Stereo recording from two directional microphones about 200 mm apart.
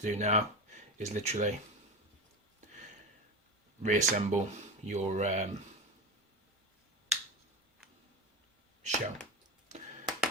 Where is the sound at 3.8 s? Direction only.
35° right (ahead or behind).